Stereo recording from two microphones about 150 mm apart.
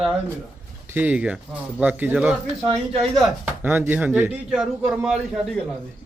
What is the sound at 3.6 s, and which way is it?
Speech, 15° right (ahead or behind).